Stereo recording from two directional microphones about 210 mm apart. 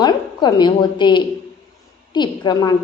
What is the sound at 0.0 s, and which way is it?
A woman's voice, 20° left (ahead or behind).